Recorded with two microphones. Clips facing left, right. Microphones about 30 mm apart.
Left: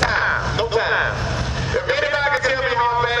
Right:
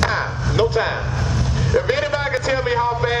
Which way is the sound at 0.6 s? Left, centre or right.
Centre.